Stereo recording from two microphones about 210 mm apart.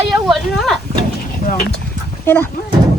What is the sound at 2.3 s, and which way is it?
Speech, 10° left (ahead or behind).